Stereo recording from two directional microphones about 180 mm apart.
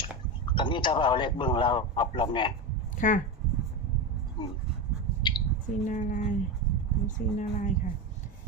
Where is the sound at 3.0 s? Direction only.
45° left (ahead or behind).